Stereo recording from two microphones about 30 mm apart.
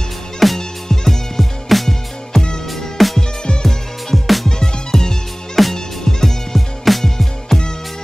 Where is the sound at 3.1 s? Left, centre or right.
Left.